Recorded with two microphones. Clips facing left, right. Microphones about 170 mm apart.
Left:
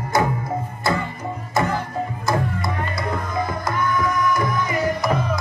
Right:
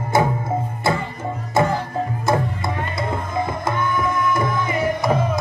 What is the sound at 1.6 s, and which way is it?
Music, 25° right (ahead or behind).